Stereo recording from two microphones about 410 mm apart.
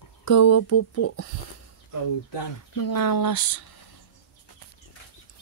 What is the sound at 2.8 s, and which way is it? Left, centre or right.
Speech, left.